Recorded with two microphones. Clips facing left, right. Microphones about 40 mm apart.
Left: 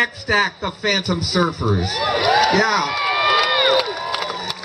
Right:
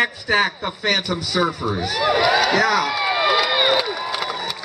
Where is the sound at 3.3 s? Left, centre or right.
Centre.